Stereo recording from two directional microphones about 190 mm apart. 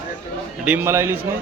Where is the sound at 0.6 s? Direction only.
10° right (ahead or behind).